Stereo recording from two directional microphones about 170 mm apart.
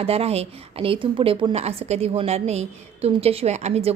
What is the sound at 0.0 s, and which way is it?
A woman's voice, 35° right (ahead or behind).